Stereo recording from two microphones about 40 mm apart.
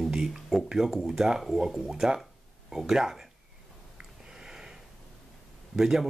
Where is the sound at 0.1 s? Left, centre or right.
Centre.